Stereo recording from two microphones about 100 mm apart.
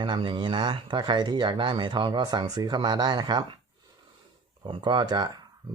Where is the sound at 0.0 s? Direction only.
55° right (ahead or behind).